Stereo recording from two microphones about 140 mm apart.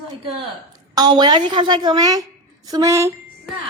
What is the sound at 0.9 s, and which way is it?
A woman's voice, 30° right (ahead or behind).